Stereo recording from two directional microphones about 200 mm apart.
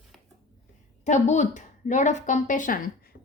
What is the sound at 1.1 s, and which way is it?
Speech, 35° left (ahead or behind).